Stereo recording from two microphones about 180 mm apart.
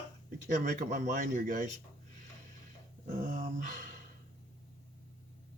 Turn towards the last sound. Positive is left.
turn(degrees=-45)  # may be behind; listen again after turning